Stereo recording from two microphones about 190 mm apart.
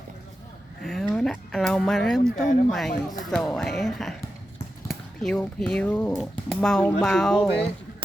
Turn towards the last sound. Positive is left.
turn(degrees=0)  # may be behind; listen again after turning